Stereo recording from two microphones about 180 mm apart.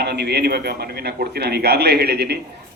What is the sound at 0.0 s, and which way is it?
A man's voice, 65° right (ahead or behind).